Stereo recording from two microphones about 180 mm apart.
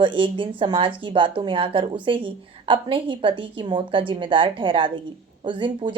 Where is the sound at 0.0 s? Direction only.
30° right (ahead or behind).